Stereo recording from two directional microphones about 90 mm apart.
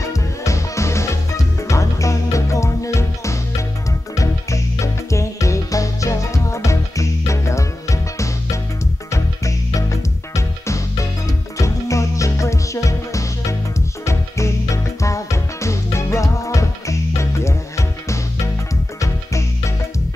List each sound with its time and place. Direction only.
0.0 s music: 35° left (ahead or behind)